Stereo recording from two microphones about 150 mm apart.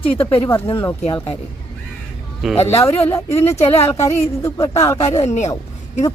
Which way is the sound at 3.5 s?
45° left (ahead or behind).